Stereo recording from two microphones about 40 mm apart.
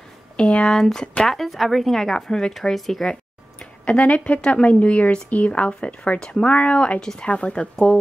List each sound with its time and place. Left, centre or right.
0.4 s speech: left
0.7 s a woman's voice: centre
2.5 s a woman's voice: centre
3.8 s a woman's voice: left; by 6.4 s centre
6.4 s a woman's voice: left
7.0 s a woman's voice: centre
7.2 s a woman's voice: left